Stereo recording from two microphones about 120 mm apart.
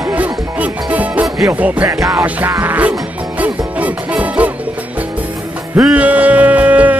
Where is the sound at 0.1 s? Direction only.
15° right (ahead or behind).